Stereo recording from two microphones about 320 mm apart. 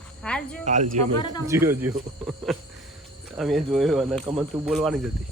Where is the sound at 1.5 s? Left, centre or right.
Centre.